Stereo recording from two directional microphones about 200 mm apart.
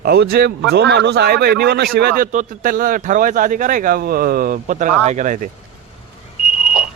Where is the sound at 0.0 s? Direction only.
50° right (ahead or behind).